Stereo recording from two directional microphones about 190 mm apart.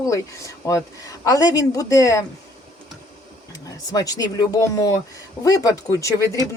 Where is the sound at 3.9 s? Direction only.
20° left (ahead or behind).